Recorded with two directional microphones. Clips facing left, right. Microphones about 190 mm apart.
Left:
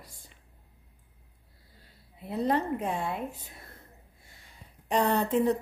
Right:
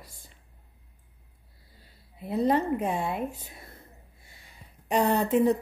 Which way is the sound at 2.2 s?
10° right (ahead or behind).